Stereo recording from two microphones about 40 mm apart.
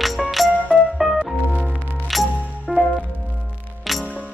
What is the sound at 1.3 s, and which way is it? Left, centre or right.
Music, right.